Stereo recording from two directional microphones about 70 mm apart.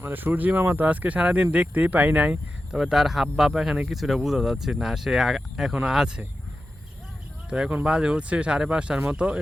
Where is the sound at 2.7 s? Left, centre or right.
Centre.